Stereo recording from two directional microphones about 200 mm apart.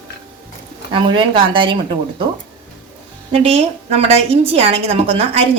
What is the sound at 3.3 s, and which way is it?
A woman's voice, 30° right (ahead or behind).